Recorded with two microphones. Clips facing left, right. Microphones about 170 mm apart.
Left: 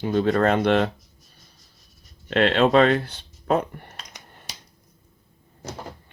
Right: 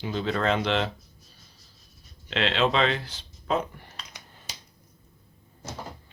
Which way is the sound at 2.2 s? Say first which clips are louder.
Left 6 dB; 50° left (ahead or behind).